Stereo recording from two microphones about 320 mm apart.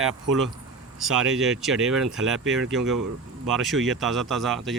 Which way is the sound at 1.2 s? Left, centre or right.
Centre.